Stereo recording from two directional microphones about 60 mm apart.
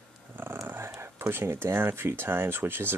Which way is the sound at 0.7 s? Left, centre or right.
Right.